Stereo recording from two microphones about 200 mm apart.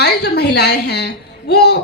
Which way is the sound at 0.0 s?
55° left (ahead or behind).